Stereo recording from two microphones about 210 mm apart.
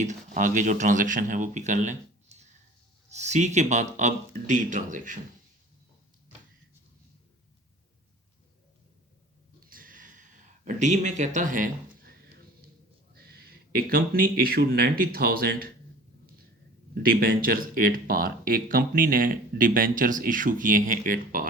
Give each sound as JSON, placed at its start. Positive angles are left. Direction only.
{"t": 0.0, "sound": "a man's voice", "side_deg": -35}
{"t": 9.6, "sound": "a sound", "side_deg": -40}
{"t": 13.1, "sound": "speech", "side_deg": -50}
{"t": 16.9, "sound": "speech", "side_deg": -45}